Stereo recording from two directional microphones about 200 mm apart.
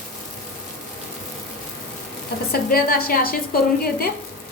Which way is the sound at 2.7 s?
50° left (ahead or behind).